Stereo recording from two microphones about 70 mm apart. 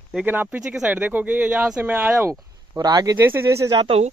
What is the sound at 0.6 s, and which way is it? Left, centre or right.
Speech, centre.